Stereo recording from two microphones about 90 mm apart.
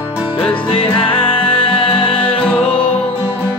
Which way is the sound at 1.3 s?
75° left (ahead or behind).